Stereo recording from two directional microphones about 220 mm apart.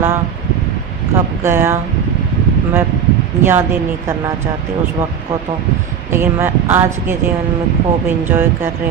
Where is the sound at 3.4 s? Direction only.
10° right (ahead or behind).